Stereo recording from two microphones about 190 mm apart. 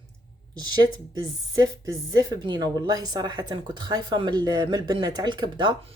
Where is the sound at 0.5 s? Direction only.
20° right (ahead or behind).